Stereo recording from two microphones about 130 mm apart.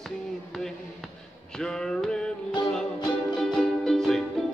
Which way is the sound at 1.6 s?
5° left (ahead or behind).